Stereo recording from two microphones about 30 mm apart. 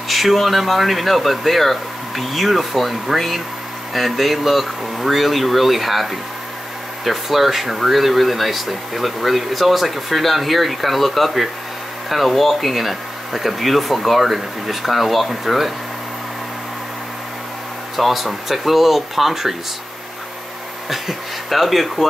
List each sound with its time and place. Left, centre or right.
0.1 s speech: centre
17.9 s speech: centre
20.9 s speech: centre